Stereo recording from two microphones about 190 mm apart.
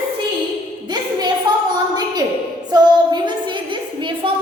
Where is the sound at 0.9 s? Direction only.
20° right (ahead or behind).